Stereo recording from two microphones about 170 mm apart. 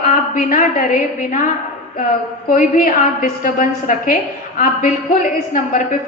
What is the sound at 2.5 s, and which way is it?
A woman's voice, 55° left (ahead or behind).